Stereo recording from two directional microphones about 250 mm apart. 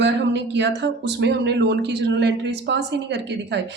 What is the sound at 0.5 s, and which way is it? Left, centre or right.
A woman's voice, right.